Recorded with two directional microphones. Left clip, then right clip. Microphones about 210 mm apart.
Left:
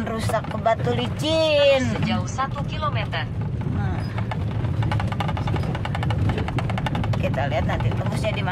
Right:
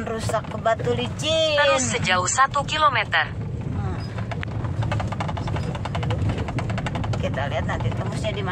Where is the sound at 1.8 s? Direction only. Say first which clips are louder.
Right 4 dB; 40° right (ahead or behind).